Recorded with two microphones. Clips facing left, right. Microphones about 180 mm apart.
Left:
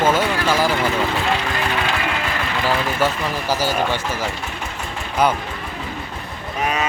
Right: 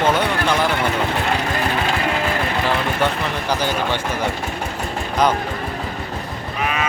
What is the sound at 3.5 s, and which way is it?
Speech, 5° left (ahead or behind).